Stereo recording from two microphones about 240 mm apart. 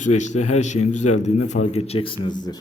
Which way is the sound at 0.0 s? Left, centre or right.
Left.